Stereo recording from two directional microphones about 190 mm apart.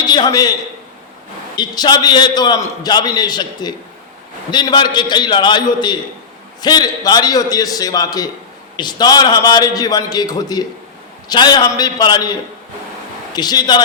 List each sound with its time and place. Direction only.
0.0 s a man's voice: 20° left (ahead or behind)
1.5 s a man's voice: 20° left (ahead or behind)